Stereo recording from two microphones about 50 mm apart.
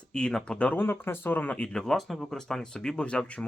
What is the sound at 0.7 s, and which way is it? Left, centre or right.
Speech, left.